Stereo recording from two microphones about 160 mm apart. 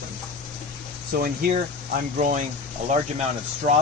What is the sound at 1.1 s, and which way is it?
Speech, 65° right (ahead or behind).